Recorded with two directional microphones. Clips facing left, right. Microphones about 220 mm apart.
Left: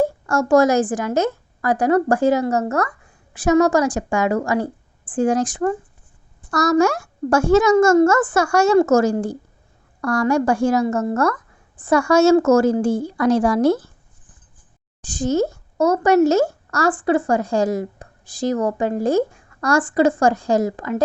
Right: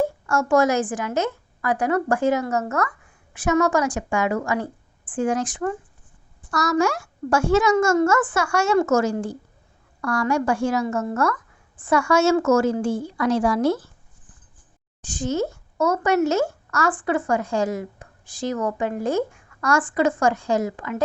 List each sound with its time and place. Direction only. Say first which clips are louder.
0.3 s speech: left 4 dB; 35° left (ahead or behind)
15.1 s speech: left 5 dB; 40° left (ahead or behind)